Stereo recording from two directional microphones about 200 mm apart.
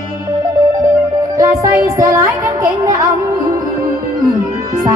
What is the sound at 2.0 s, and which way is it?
Child singing, 15° right (ahead or behind).